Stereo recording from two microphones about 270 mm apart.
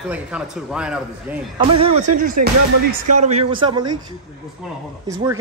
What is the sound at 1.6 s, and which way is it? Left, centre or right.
A man's voice, centre.